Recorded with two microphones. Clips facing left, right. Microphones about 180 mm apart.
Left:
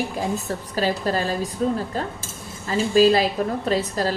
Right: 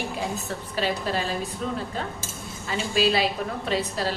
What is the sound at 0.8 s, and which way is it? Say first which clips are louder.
Speech: left 4 dB; 40° left (ahead or behind).